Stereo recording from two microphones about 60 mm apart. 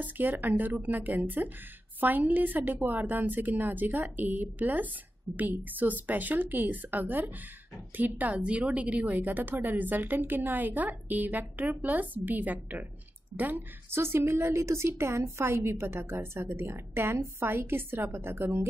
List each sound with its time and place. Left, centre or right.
0.0 s a woman's voice: right
8.4 s a woman's voice: centre; by 18.7 s right